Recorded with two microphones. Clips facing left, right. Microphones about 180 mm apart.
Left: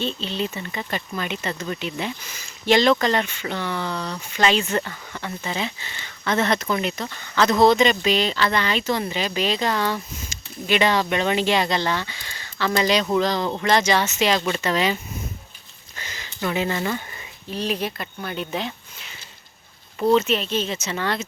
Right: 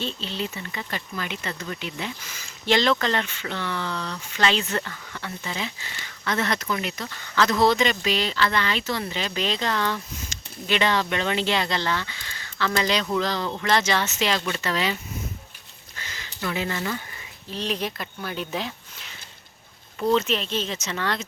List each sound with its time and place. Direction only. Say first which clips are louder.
0.0 s speech: left 4 dB; 20° left (ahead or behind)
16.0 s a sound: left 4 dB; 20° left (ahead or behind)
17.5 s speech: left 3 dB; 5° left (ahead or behind)
20.1 s speech: left 3 dB; 5° left (ahead or behind)